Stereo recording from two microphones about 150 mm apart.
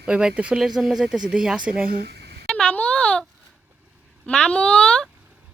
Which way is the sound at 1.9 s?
90° right.